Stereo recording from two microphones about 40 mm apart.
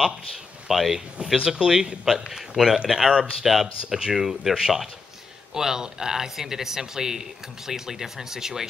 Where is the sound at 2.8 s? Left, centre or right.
Centre.